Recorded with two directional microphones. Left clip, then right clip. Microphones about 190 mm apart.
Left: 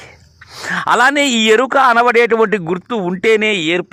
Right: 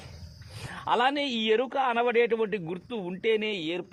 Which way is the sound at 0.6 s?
45° left (ahead or behind).